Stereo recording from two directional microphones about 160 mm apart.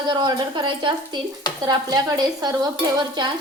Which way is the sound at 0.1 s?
30° right (ahead or behind).